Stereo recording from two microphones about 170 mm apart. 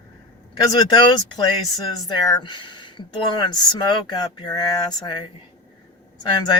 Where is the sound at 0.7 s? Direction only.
25° left (ahead or behind).